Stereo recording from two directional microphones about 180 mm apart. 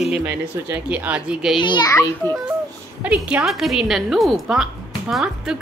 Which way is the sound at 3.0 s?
5° right (ahead or behind).